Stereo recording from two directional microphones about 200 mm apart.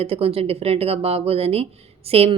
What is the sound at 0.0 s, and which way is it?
Speech, 30° right (ahead or behind).